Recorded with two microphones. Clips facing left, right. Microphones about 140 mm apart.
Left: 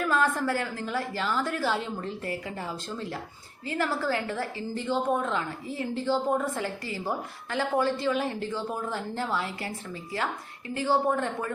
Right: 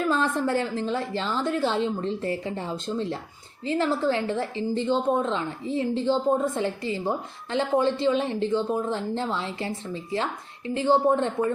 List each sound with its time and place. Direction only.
0.1 s a woman's voice: 25° right (ahead or behind)